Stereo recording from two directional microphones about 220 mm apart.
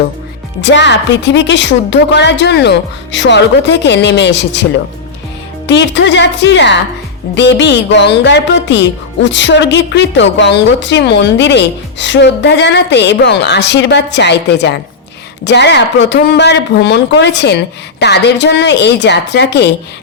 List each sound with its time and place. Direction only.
0.6 s speech: 55° left (ahead or behind)
5.6 s speech: 50° left (ahead or behind)